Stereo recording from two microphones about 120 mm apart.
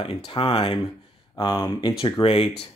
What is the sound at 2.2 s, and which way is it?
Speech, 55° left (ahead or behind).